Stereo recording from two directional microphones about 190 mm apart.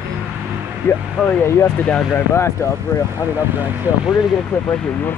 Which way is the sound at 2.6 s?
15° left (ahead or behind).